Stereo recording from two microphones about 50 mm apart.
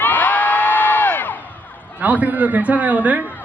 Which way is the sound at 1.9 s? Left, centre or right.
Right.